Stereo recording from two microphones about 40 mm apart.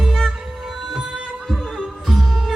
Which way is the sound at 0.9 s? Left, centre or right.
Centre.